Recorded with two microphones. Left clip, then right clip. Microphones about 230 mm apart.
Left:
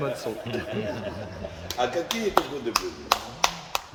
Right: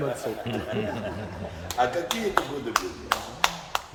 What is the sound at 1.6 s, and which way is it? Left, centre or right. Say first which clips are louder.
Speech: right 2 dB; left.